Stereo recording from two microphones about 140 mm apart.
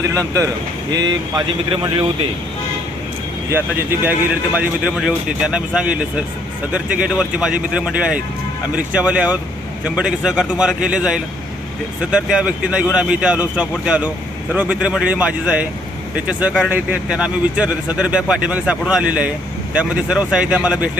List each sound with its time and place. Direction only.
0.0 s speech: 25° right (ahead or behind)
4.5 s speech: 10° right (ahead or behind)